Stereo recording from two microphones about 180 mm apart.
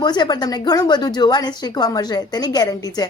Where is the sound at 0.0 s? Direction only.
25° left (ahead or behind).